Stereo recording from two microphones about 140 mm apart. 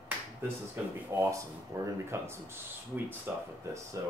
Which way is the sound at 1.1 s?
20° right (ahead or behind).